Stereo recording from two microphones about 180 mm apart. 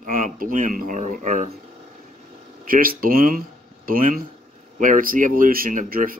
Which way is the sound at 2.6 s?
50° right (ahead or behind).